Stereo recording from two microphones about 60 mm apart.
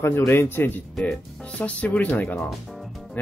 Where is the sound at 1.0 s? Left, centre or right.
Centre.